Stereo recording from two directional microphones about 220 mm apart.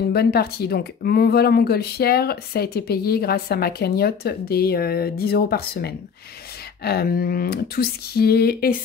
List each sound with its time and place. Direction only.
0.1 s speech: 45° left (ahead or behind)